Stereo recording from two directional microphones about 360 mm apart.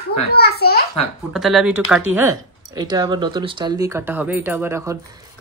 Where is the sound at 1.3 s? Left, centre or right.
Centre.